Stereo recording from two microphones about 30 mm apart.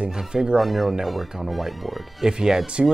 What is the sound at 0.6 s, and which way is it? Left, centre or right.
Speech, centre.